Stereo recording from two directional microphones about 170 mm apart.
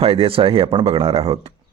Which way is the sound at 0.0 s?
35° right (ahead or behind).